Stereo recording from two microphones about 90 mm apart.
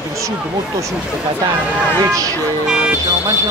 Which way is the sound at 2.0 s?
40° right (ahead or behind).